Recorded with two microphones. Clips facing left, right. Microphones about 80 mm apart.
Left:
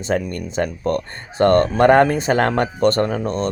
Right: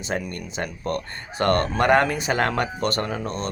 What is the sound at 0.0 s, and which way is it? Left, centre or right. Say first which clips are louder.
Speech: left 7 dB; left.